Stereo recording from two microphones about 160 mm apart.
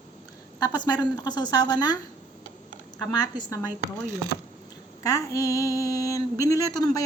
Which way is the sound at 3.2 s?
25° left (ahead or behind).